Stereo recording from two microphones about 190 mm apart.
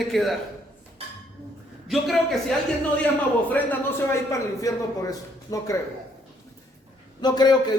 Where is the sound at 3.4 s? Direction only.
10° left (ahead or behind).